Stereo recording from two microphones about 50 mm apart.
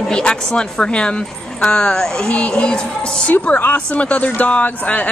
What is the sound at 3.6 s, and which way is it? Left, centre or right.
Speech, left.